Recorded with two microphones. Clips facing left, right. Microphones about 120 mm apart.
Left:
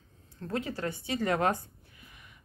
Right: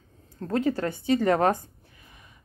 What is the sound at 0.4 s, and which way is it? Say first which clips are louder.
Speech: right 8 dB; 45° right (ahead or behind).